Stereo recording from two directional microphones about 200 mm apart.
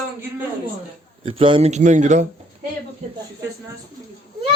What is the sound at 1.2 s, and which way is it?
Speech, 25° right (ahead or behind).